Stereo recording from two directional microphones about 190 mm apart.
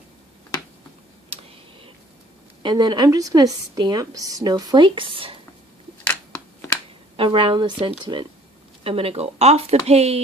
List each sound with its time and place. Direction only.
1.3 s a sound: 30° right (ahead or behind)
2.6 s a woman's voice: 20° right (ahead or behind)
7.2 s a woman's voice: 25° right (ahead or behind)